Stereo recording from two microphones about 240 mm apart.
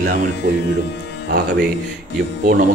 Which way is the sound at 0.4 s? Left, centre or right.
Right.